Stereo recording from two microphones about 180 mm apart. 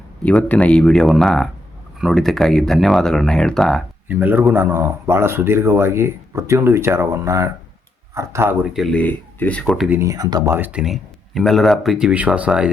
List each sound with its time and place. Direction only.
0.2 s speech: 5° left (ahead or behind)
4.1 s speech: 10° right (ahead or behind)
8.6 s speech: centre (ahead or behind)
10.0 s speech: 20° right (ahead or behind)